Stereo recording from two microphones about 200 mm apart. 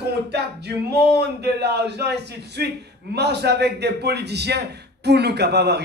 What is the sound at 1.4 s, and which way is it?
A man's voice, 55° right (ahead or behind).